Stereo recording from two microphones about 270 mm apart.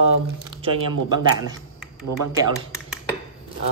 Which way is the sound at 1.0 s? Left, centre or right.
Centre.